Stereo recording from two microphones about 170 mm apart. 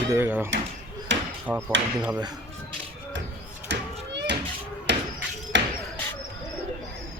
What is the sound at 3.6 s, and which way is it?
Children playing, 90° right.